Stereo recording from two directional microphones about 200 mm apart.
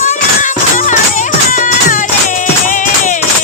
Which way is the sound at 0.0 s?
40° left (ahead or behind).